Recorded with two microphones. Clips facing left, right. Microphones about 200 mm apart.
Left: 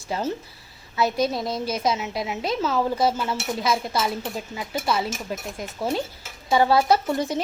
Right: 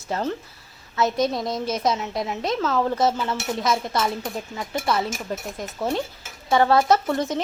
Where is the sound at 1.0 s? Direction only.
5° left (ahead or behind).